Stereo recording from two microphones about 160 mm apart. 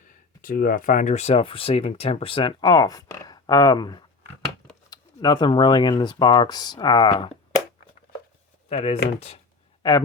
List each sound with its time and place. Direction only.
0.1 s speech: 60° left (ahead or behind); by 7.3 s 30° left (ahead or behind)
8.7 s speech: 40° left (ahead or behind)
9.8 s speech: 25° left (ahead or behind)